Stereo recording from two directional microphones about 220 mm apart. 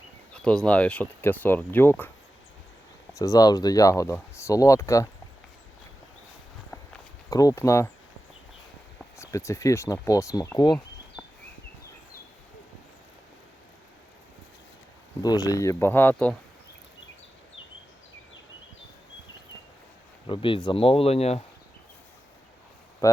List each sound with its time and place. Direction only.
0.3 s speech: 5° left (ahead or behind)
3.2 s speech: 15° left (ahead or behind)
7.3 s speech: 15° left (ahead or behind)
9.1 s speech: 15° left (ahead or behind)
15.2 s speech: 15° left (ahead or behind)
20.2 s speech: 20° left (ahead or behind)